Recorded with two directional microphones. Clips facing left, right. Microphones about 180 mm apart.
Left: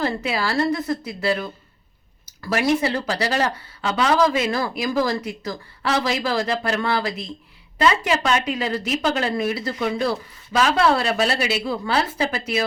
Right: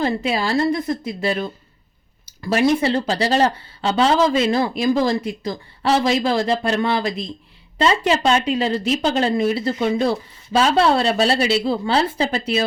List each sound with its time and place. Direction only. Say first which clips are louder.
0.0 s speech: right 3 dB; 20° right (ahead or behind)